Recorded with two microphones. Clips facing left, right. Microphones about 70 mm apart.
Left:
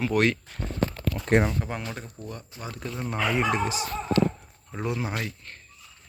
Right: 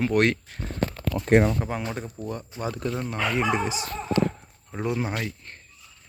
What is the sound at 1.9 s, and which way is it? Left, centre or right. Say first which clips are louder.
Speech: right 5 dB; centre.